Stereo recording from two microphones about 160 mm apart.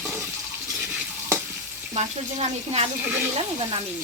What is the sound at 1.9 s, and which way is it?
Speech, 45° right (ahead or behind).